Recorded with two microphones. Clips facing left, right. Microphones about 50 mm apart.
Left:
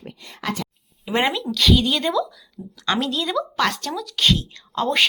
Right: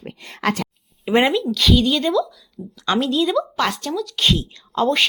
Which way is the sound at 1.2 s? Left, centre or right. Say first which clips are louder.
Right 4 dB; centre.